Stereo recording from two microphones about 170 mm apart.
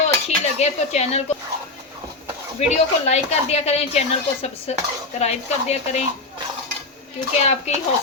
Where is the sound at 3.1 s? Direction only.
40° left (ahead or behind).